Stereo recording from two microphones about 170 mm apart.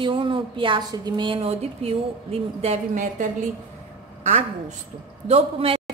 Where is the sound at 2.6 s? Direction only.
40° right (ahead or behind).